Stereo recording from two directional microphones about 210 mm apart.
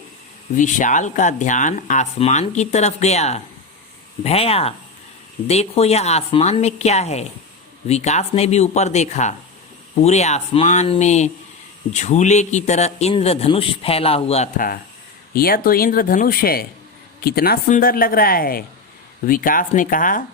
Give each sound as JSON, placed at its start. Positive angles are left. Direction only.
{"t": 0.5, "sound": "a man's voice", "side_deg": 40}